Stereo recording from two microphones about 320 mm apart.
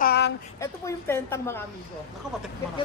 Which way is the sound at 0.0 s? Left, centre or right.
Left.